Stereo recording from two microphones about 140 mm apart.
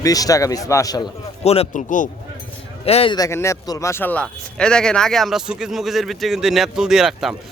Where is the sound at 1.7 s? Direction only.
65° left (ahead or behind).